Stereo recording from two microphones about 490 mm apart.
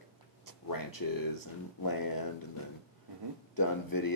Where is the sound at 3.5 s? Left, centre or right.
Left.